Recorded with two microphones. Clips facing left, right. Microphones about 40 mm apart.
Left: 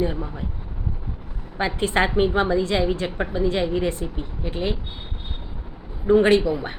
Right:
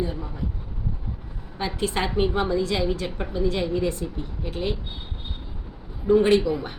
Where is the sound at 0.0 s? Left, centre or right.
Left.